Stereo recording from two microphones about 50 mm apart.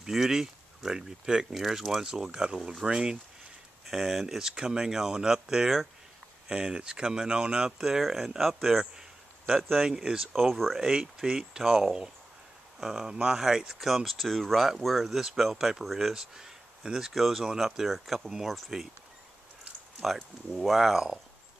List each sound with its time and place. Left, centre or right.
0.0 s speech: centre
9.7 s speech: centre
10.3 s speech: centre
20.0 s speech: centre